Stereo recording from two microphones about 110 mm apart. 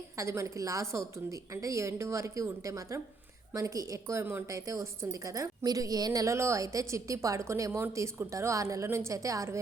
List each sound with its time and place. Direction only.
0.2 s a woman's voice: 25° right (ahead or behind)